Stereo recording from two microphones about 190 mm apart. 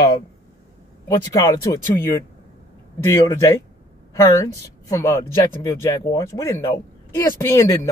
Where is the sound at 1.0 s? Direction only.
20° left (ahead or behind).